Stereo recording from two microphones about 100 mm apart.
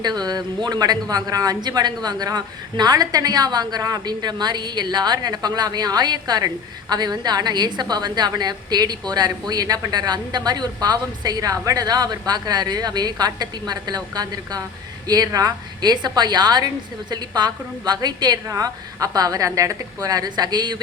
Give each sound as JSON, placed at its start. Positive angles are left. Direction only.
{"t": 0.0, "sound": "a woman's voice", "side_deg": -45}